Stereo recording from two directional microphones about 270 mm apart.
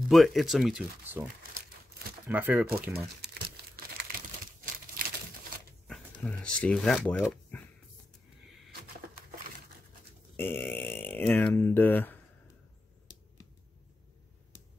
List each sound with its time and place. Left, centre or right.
0.1 s speech: centre
2.2 s speech: centre
2.9 s crumpling: right
5.9 s speech: centre
10.3 s speech: centre